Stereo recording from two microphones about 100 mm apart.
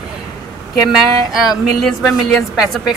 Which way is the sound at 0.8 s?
5° right (ahead or behind).